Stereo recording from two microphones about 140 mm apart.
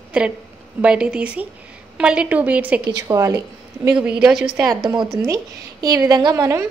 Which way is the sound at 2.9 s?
25° right (ahead or behind).